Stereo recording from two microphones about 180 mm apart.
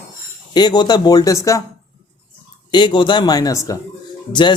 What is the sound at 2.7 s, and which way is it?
Speech, 25° left (ahead or behind).